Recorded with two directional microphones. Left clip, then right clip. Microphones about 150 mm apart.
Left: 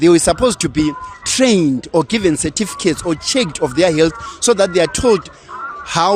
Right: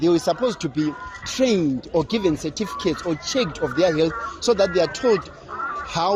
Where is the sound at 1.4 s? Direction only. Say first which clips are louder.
Left 6 dB; 70° left (ahead or behind); by 5.2 s 90° left.